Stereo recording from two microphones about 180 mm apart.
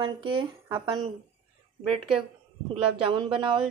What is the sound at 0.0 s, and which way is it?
Speech, 30° right (ahead or behind).